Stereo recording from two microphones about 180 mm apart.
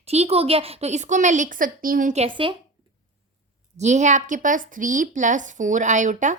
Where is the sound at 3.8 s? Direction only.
40° right (ahead or behind).